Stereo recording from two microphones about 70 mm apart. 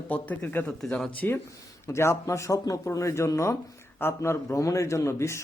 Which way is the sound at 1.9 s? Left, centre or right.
Left.